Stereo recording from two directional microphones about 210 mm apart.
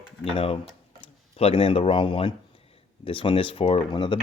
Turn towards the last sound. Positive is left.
turn(degrees=25)  # may be behind; listen again after turning